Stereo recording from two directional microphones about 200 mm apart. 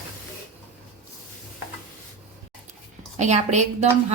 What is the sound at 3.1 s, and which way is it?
Speech, 35° right (ahead or behind).